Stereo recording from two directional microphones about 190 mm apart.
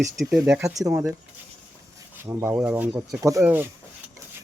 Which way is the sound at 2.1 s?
10° right (ahead or behind).